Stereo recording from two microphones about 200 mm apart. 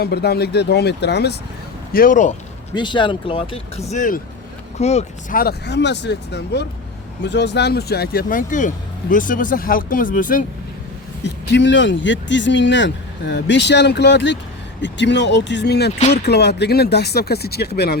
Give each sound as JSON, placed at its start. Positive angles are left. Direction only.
{"t": 0.0, "sound": "speech", "side_deg": 55}
{"t": 1.9, "sound": "speech", "side_deg": 45}
{"t": 2.7, "sound": "speech", "side_deg": 25}
{"t": 5.4, "sound": "speech", "side_deg": 55}
{"t": 11.2, "sound": "speech", "side_deg": 60}